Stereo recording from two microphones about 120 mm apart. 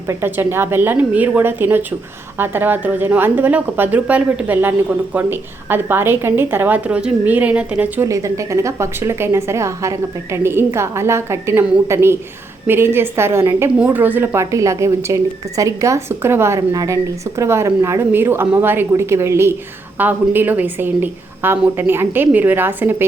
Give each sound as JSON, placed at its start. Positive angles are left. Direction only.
{"t": 0.1, "sound": "a woman's voice", "side_deg": -20}
{"t": 8.0, "sound": "a woman's voice", "side_deg": -25}